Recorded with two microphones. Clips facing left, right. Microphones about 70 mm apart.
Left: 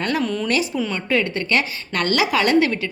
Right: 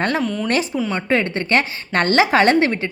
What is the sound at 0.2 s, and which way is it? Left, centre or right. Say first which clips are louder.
Speech: right 1 dB; centre.